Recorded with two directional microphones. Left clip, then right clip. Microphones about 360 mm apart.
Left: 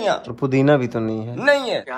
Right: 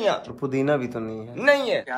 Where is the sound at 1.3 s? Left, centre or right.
Centre.